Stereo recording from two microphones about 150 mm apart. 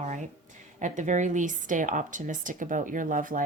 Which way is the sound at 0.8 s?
55° right (ahead or behind).